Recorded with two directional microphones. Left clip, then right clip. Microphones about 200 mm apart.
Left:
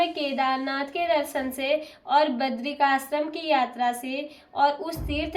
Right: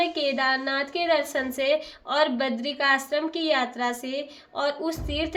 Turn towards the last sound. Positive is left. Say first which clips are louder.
# right 1 dB
turn(degrees=-35)  # may be behind; listen again after turning